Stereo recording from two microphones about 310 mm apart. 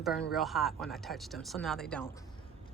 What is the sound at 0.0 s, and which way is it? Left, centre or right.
Speech, centre.